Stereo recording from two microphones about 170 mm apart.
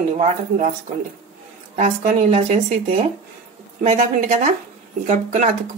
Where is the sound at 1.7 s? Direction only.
50° right (ahead or behind).